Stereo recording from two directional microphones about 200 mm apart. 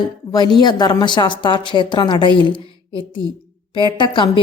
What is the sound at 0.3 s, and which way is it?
A woman's voice, 20° left (ahead or behind).